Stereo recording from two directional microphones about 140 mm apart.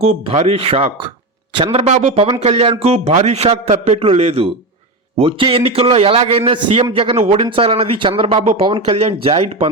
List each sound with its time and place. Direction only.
0.3 s speech: 45° right (ahead or behind)